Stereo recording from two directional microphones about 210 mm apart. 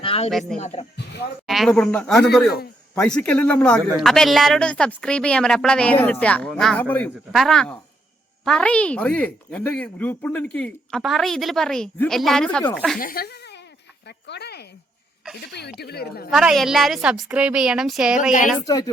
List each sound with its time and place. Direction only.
0.0 s a sound: 25° left (ahead or behind)
0.3 s speech: centre (ahead or behind)
0.6 s speech: 30° left (ahead or behind)
1.5 s speech: centre (ahead or behind)
13.0 s speech: 45° left (ahead or behind)
16.3 s speech: centre (ahead or behind)
18.2 s speech: 40° left (ahead or behind)
18.6 s speech: 15° left (ahead or behind)